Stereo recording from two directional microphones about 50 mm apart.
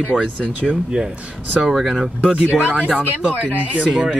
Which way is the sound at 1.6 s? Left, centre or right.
Centre.